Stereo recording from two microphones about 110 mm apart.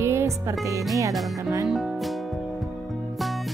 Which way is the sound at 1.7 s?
Centre (ahead or behind).